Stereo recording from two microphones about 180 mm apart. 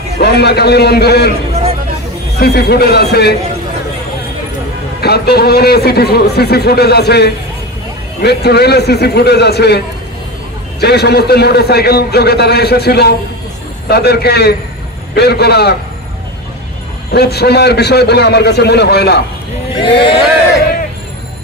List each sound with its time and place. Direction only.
0.2 s a man's voice: 65° left (ahead or behind)
2.3 s a man's voice: 60° left (ahead or behind)
5.0 s a man's voice: 65° left (ahead or behind)
17.1 s a man's voice: 65° left (ahead or behind)
19.7 s speech: 30° left (ahead or behind)